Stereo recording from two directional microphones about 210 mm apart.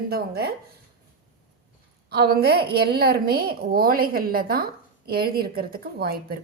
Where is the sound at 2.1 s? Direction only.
50° right (ahead or behind).